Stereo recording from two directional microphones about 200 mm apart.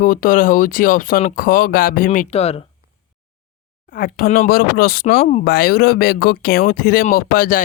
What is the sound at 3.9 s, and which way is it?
Speech, 45° left (ahead or behind).